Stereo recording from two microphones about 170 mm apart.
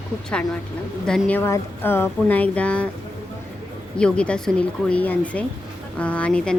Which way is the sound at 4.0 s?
5° left (ahead or behind).